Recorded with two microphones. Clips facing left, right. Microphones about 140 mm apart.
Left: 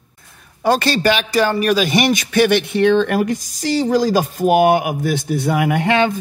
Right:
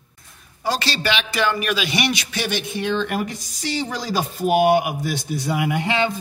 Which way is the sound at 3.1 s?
45° left (ahead or behind).